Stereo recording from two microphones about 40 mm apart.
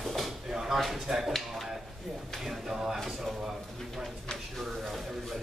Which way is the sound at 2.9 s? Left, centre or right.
Centre.